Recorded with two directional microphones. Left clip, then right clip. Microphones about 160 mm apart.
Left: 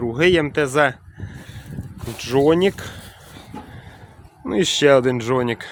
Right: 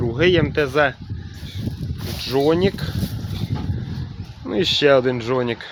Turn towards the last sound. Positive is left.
turn(degrees=30)  # may be behind; listen again after turning